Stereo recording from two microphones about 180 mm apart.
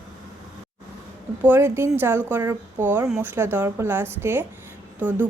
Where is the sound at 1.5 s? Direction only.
15° right (ahead or behind).